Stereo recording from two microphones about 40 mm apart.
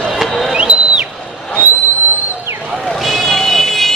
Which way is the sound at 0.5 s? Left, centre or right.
Right.